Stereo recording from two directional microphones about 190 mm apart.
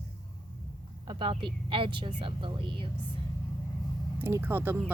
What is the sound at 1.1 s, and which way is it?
Speech, 25° right (ahead or behind).